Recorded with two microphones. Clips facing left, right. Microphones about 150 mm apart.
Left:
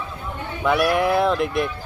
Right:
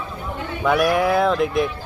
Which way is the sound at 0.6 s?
Centre (ahead or behind).